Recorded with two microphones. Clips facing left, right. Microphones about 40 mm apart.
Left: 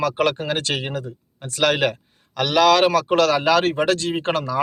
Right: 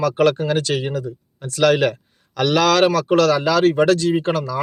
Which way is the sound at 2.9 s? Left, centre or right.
Left.